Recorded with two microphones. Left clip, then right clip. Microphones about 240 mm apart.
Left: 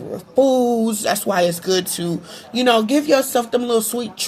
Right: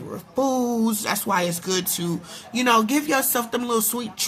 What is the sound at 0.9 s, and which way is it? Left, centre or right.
Speech, centre.